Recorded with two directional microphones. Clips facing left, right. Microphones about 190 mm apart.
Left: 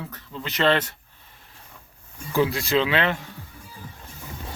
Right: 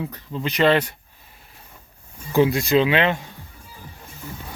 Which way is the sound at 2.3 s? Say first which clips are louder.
Right 4 dB; 20° right (ahead or behind).